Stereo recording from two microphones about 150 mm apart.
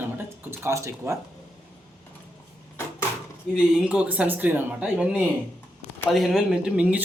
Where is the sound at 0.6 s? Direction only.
20° right (ahead or behind).